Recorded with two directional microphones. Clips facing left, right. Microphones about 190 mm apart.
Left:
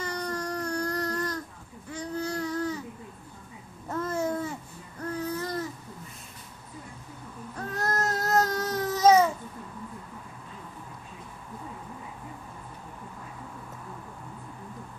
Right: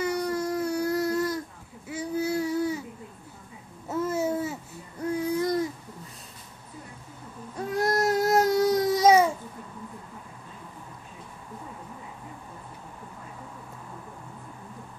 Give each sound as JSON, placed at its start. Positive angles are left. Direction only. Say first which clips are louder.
{"t": 0.0, "sound": "baby cry", "louder": "right 6 dB", "side_deg": -10}
{"t": 3.9, "sound": "babbling", "louder": "right 2 dB", "side_deg": -5}
{"t": 5.0, "sound": "a sound", "louder": "right 6 dB", "side_deg": -10}
{"t": 7.5, "sound": "baby cry", "louder": "right 5 dB", "side_deg": -10}